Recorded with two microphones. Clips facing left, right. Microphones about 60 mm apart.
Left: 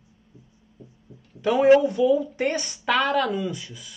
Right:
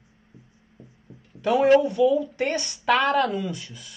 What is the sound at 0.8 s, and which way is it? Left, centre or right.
Music, right.